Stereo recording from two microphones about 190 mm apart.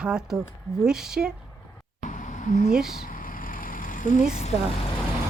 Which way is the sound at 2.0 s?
40° left (ahead or behind).